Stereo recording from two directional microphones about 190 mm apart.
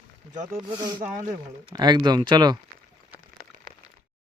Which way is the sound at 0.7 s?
25° right (ahead or behind).